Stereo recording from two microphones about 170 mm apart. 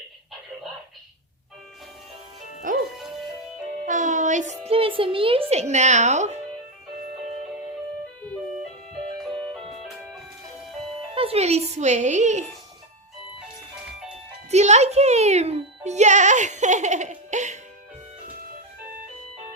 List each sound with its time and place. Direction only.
2.7 s music: 55° right (ahead or behind)
3.8 s a sound: 45° right (ahead or behind)
8.9 s music: centre (ahead or behind)
10.8 s speech: 35° right (ahead or behind)
14.5 s a child's voice: 40° right (ahead or behind)